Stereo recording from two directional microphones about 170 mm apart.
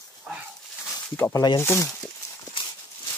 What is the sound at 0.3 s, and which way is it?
Dog, 5° right (ahead or behind).